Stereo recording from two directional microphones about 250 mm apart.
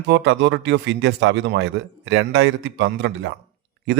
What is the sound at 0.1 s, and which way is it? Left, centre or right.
A man's voice, right.